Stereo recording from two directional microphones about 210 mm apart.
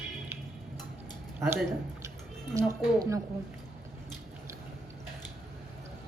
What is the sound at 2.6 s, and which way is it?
Speech, 15° right (ahead or behind).